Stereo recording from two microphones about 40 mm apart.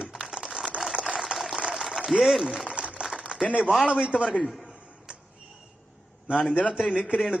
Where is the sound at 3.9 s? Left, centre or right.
Right.